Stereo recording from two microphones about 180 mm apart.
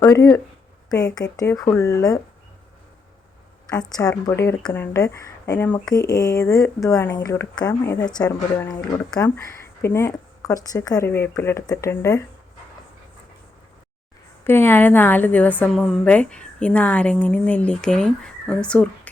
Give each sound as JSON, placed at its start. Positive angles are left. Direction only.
{"t": 0.0, "sound": "speech", "side_deg": 20}
{"t": 3.7, "sound": "speech", "side_deg": 20}
{"t": 14.4, "sound": "a woman's voice", "side_deg": 10}